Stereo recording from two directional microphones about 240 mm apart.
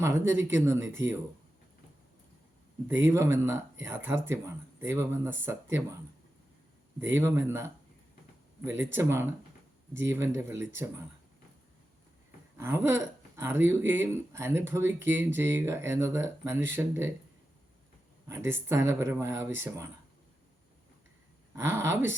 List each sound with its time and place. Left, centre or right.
0.0 s speech: centre
2.8 s speech: centre
7.0 s speech: centre
12.5 s speech: centre
18.3 s speech: centre
21.5 s speech: centre